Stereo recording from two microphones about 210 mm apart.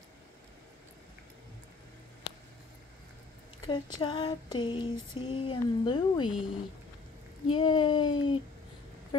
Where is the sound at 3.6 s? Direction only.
20° left (ahead or behind).